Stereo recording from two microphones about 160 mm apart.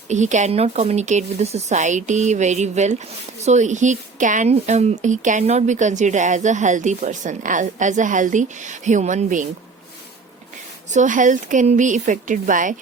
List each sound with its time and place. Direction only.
0.1 s speech: 50° right (ahead or behind)
10.9 s speech: 55° right (ahead or behind)